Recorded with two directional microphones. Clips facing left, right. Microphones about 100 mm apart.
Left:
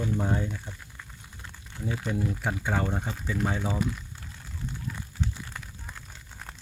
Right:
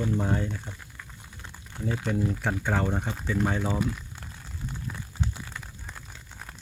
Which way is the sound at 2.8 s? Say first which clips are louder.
Right 2 dB; 5° right (ahead or behind).